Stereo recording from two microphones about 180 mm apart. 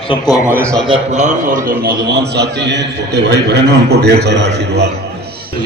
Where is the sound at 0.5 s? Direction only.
15° right (ahead or behind).